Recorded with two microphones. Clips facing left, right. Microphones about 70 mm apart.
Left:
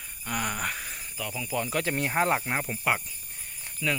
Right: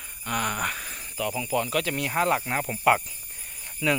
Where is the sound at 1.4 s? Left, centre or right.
Centre.